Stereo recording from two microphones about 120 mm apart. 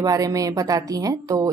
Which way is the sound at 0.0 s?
30° right (ahead or behind).